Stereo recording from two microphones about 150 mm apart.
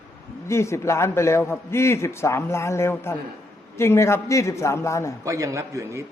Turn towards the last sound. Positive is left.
turn(degrees=-20)  # may be behind; listen again after turning